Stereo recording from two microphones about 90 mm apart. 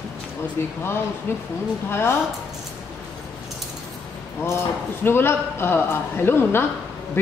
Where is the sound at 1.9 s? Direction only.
25° left (ahead or behind).